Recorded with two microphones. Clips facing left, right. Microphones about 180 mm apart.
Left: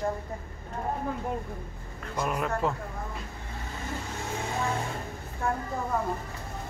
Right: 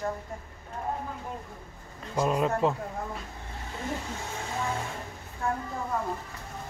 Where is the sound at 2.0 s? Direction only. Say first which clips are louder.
Right 4 dB; 25° right (ahead or behind).